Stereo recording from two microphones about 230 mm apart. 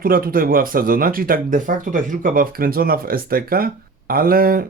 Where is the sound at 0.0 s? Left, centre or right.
Right.